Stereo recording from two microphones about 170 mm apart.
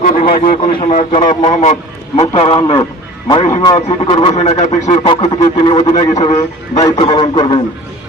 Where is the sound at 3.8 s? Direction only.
40° left (ahead or behind).